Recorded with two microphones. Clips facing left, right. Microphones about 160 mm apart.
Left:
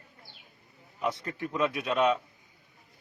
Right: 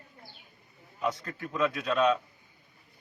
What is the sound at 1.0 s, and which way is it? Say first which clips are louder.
A man's voice: left 1 dB; 20° left (ahead or behind).